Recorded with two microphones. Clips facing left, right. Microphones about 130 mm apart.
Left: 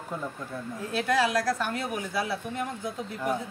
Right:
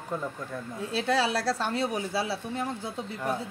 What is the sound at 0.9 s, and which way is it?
A woman's voice, 30° right (ahead or behind).